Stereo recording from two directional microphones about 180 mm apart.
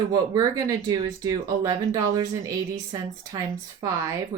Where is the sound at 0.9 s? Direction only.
20° right (ahead or behind).